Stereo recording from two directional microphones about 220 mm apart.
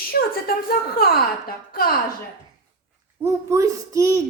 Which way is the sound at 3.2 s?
15° right (ahead or behind).